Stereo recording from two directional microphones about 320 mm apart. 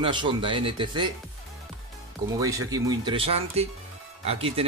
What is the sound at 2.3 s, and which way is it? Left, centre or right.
Speech, centre.